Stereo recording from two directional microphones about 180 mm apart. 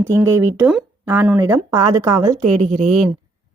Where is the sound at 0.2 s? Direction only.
10° right (ahead or behind).